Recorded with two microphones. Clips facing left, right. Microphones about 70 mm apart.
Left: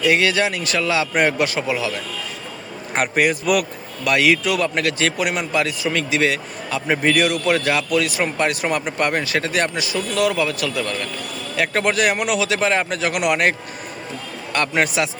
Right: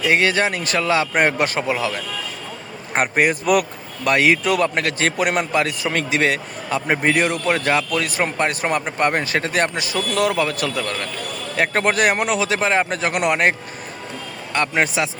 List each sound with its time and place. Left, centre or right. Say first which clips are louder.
0.0 s speech: even; right
8.2 s speech: even; right